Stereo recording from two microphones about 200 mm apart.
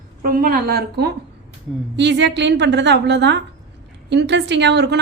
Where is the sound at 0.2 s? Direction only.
45° right (ahead or behind).